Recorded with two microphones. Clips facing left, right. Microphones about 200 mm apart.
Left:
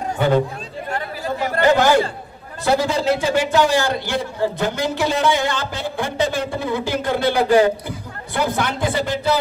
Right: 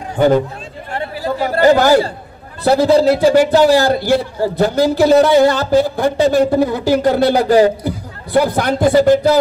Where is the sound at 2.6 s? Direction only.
35° right (ahead or behind).